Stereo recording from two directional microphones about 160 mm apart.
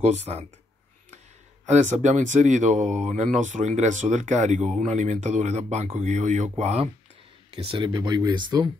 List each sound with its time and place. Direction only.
0.0 s speech: 40° right (ahead or behind)
1.7 s speech: 50° right (ahead or behind); by 8.6 s 30° right (ahead or behind)